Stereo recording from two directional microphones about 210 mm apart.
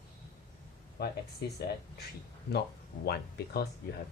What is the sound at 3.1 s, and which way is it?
Speech, 50° left (ahead or behind).